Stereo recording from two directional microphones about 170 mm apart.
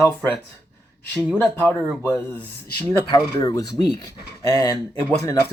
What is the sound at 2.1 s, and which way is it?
Speech, 10° left (ahead or behind).